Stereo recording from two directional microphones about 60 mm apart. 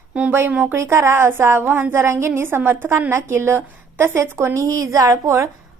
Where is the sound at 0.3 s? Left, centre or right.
Right.